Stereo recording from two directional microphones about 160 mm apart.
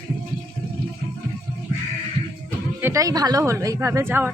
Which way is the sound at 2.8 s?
15° right (ahead or behind).